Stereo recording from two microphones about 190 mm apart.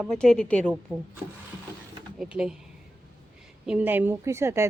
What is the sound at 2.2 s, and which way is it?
Speech, 5° right (ahead or behind).